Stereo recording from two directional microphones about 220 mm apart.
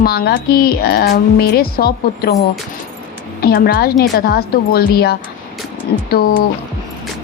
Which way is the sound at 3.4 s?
45° left (ahead or behind).